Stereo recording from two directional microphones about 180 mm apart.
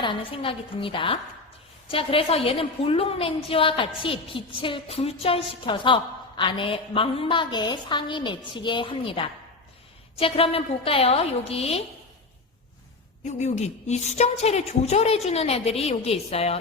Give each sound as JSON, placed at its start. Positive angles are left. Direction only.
{"t": 0.0, "sound": "a woman's voice", "side_deg": 30}
{"t": 13.2, "sound": "a woman's voice", "side_deg": 40}